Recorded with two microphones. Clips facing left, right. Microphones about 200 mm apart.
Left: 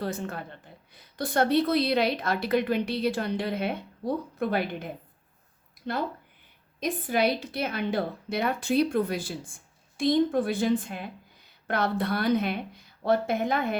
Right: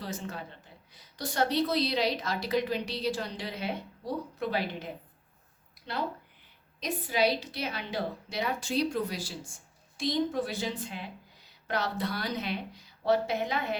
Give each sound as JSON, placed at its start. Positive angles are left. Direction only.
{"t": 0.0, "sound": "a woman's voice", "side_deg": 55}
{"t": 5.8, "sound": "a sound", "side_deg": 50}
{"t": 6.7, "sound": "a woman's voice", "side_deg": 50}